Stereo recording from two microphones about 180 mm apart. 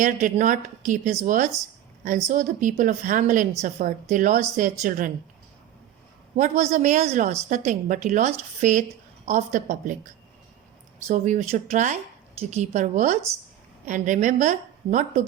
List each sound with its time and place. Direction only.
0.0 s a woman's voice: 45° right (ahead or behind)
6.3 s a woman's voice: 40° right (ahead or behind)
11.1 s a woman's voice: 40° right (ahead or behind)